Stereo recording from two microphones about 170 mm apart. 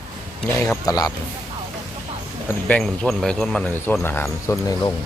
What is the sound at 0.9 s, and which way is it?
Speech, 20° left (ahead or behind).